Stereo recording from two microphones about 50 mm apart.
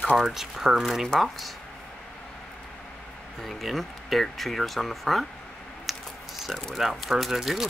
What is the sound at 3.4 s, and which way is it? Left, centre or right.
Speech, centre.